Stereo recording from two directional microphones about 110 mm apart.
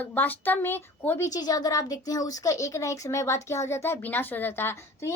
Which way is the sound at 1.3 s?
35° left (ahead or behind).